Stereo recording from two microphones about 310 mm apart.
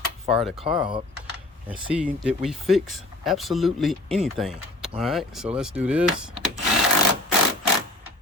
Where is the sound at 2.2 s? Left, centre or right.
Centre.